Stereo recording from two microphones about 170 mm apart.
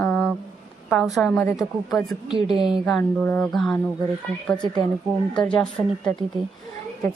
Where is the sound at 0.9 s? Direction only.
Centre (ahead or behind).